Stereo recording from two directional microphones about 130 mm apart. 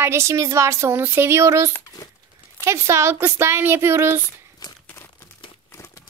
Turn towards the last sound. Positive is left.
turn(degrees=-20)  # may be behind; listen again after turning